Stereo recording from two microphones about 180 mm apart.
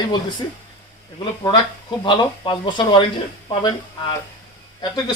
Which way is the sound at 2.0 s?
25° left (ahead or behind).